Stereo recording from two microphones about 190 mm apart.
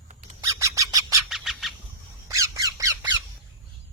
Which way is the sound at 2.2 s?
15° right (ahead or behind).